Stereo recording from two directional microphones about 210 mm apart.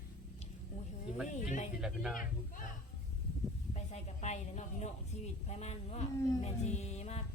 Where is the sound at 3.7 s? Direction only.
30° left (ahead or behind).